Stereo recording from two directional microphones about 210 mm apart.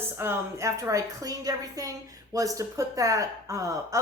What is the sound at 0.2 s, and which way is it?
A woman's voice, 15° right (ahead or behind).